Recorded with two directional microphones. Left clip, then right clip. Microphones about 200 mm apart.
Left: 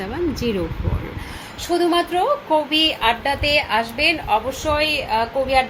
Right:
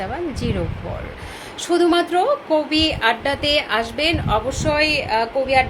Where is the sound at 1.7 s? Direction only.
20° right (ahead or behind).